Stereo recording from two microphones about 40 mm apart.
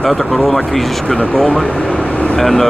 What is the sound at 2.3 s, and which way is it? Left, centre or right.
Speech, centre.